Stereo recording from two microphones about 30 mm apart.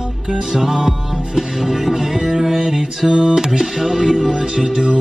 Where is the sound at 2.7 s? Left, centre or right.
Centre.